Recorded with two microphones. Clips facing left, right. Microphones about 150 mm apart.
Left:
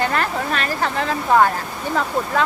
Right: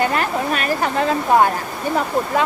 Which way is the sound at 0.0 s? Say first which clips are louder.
Right 2 dB; 10° right (ahead or behind).